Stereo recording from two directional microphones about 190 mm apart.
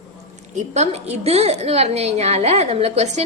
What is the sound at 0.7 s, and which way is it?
A woman's voice, 35° right (ahead or behind).